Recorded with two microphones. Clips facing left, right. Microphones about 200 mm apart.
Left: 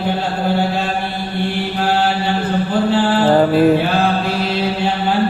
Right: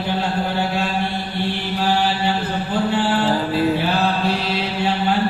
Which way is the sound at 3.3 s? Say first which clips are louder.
Left 7 dB; 60° left (ahead or behind).